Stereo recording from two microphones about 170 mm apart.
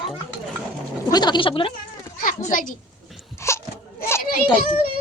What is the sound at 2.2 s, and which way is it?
Speech, 50° left (ahead or behind).